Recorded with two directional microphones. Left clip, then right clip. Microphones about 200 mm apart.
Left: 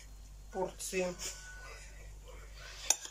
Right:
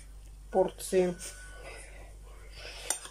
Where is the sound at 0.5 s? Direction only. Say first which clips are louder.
Right 10 dB; 40° right (ahead or behind).